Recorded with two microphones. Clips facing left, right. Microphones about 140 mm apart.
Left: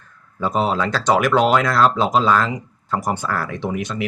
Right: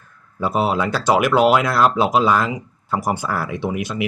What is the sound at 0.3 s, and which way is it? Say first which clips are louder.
Speech: right 1 dB; 10° right (ahead or behind).